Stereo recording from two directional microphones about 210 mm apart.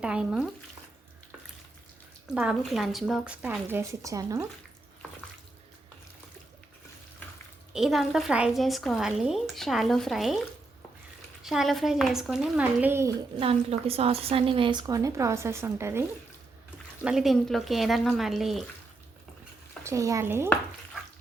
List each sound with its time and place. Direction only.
0.0 s a woman's voice: 5° right (ahead or behind)
2.3 s a woman's voice: 5° right (ahead or behind)
7.7 s a woman's voice: centre (ahead or behind)
11.4 s a woman's voice: centre (ahead or behind)
13.4 s a woman's voice: 30° right (ahead or behind); by 18.6 s centre (ahead or behind)
19.8 s speech: 15° right (ahead or behind)